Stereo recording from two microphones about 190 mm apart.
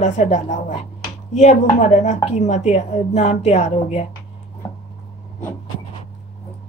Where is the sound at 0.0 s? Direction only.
40° left (ahead or behind).